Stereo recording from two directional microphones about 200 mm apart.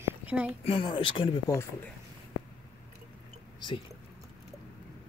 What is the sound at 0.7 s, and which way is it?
Speech, 25° left (ahead or behind).